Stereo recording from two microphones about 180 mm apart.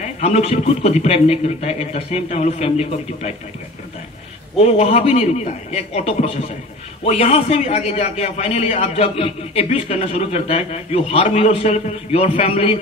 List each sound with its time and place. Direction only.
0.0 s a man's voice: 35° left (ahead or behind)
4.6 s a man's voice: 35° left (ahead or behind)